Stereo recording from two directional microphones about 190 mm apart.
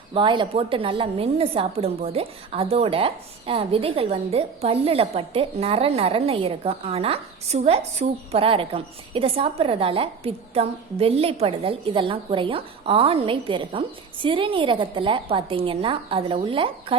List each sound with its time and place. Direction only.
0.1 s a woman's voice: 25° right (ahead or behind)